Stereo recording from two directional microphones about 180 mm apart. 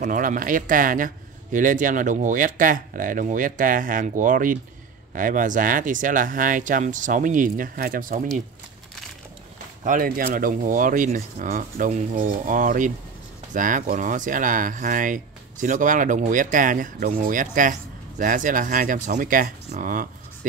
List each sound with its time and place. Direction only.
0.0 s speech: 45° right (ahead or behind)
9.8 s speech: 50° right (ahead or behind)